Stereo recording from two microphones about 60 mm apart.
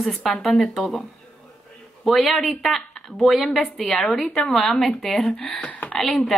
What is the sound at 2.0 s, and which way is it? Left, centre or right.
A woman's voice, centre.